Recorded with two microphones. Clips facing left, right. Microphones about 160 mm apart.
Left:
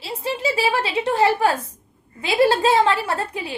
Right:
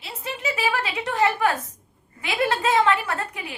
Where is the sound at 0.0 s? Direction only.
30° left (ahead or behind).